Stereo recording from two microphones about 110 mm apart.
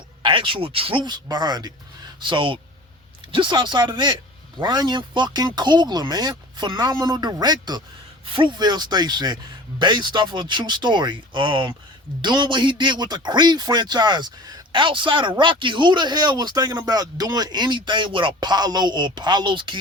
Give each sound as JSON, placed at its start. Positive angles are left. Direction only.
{"t": 0.2, "sound": "speech", "side_deg": -50}
{"t": 2.2, "sound": "speech", "side_deg": -50}